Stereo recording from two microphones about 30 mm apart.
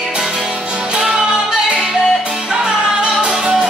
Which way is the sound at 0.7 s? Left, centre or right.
Right.